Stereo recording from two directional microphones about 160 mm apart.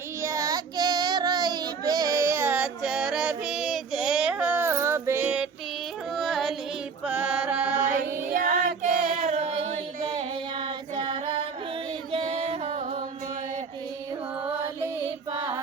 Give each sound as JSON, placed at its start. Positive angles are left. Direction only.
{"t": 0.2, "sound": "child singing", "side_deg": -20}
{"t": 6.1, "sound": "carnatic music", "side_deg": 0}
{"t": 7.0, "sound": "chant", "side_deg": -5}
{"t": 8.3, "sound": "child singing", "side_deg": -60}
{"t": 12.1, "sound": "music", "side_deg": -35}
{"t": 15.3, "sound": "child singing", "side_deg": -25}